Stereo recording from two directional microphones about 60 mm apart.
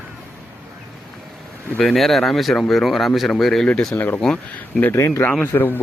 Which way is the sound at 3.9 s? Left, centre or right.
Left.